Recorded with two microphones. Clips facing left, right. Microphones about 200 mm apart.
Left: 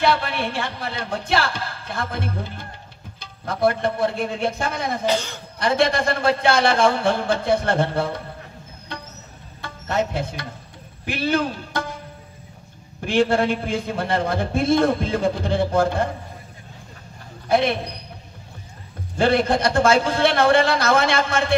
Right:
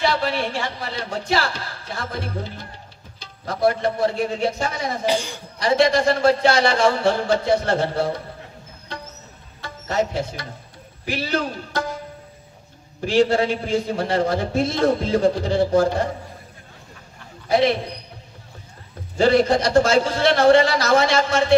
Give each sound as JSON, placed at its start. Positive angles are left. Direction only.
{"t": 0.0, "sound": "a man's voice", "side_deg": 55}
{"t": 5.0, "sound": "speech", "side_deg": -10}
{"t": 5.6, "sound": "a man's voice", "side_deg": 55}
{"t": 9.6, "sound": "a man's voice", "side_deg": 55}
{"t": 13.0, "sound": "a man's voice", "side_deg": 55}
{"t": 17.5, "sound": "a man's voice", "side_deg": 55}
{"t": 19.1, "sound": "a man's voice", "side_deg": 55}